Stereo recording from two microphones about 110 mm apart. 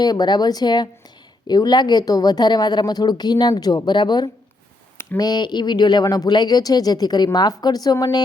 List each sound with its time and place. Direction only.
0.0 s speech: 40° left (ahead or behind)